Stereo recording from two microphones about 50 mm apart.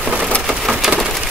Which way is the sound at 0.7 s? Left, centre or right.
Centre.